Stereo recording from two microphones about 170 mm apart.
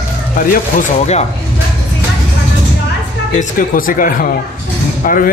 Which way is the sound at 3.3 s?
50° left (ahead or behind).